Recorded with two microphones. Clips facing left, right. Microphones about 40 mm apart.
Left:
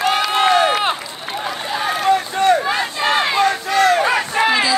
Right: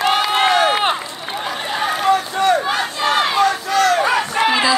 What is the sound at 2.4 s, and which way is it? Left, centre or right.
Battle cry, left.